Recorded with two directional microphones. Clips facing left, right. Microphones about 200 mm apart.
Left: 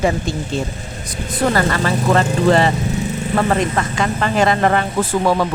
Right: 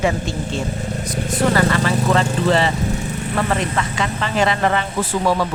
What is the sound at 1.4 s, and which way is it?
Vehicle, 40° left (ahead or behind).